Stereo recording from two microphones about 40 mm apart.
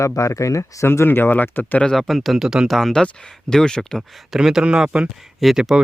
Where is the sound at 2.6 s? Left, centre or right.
Centre.